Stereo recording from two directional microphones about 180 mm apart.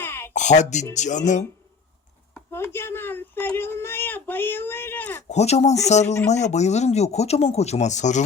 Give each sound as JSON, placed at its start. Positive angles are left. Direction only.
{"t": 0.0, "sound": "a sound", "side_deg": 15}
{"t": 0.3, "sound": "speech", "side_deg": 40}
{"t": 2.5, "sound": "speech", "side_deg": 15}
{"t": 5.3, "sound": "speech", "side_deg": 35}